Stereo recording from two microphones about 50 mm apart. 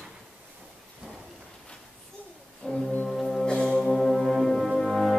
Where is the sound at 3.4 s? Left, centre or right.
Centre.